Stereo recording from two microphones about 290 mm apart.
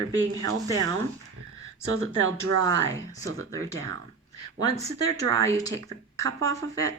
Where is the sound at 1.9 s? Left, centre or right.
Right.